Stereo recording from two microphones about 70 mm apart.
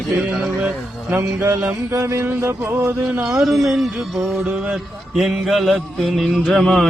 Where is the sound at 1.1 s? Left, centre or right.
Right.